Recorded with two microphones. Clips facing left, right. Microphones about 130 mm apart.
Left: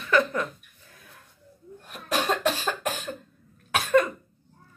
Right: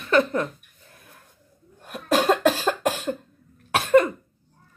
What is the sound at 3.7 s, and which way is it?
Cough, 25° right (ahead or behind).